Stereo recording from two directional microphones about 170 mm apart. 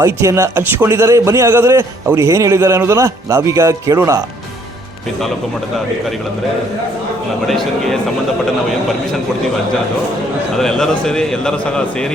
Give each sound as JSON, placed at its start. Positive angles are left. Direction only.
{"t": 0.0, "sound": "a man's voice", "side_deg": -15}
{"t": 7.4, "sound": "a man's voice", "side_deg": 0}
{"t": 10.6, "sound": "a man's voice", "side_deg": 5}